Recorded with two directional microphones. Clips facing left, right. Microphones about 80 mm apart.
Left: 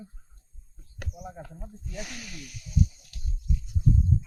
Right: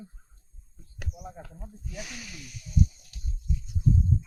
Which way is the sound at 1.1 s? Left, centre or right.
Centre.